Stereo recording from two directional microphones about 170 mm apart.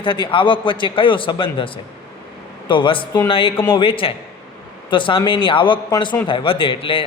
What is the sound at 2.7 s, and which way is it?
A man's voice, 30° left (ahead or behind).